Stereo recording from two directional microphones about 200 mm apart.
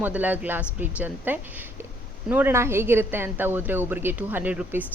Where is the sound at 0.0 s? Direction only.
10° right (ahead or behind).